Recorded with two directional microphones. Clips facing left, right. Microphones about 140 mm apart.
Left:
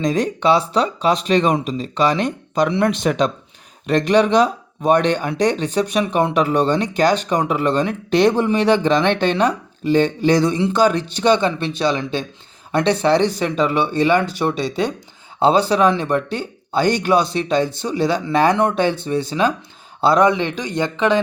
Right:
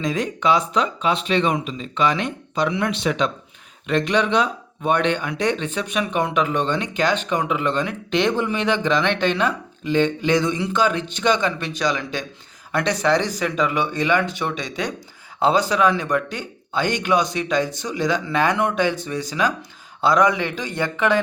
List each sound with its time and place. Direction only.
0.0 s speech: 35° left (ahead or behind); by 21.2 s 20° left (ahead or behind)